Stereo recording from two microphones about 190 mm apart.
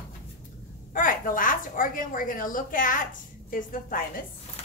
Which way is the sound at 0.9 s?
45° left (ahead or behind).